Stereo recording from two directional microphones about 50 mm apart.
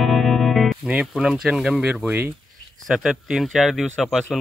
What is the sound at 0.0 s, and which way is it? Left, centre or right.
Music, centre.